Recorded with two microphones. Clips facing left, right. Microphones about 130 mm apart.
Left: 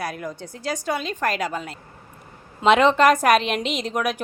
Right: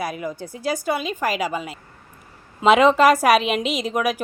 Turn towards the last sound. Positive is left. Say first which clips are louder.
# right 2 dB
turn(degrees=-5)  # may be behind; listen again after turning